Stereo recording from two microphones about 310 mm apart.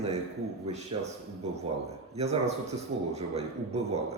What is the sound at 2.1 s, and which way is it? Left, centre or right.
A man's voice, right.